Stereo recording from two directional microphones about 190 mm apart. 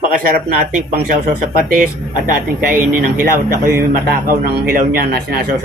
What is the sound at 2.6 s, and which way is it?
Speech, 50° right (ahead or behind).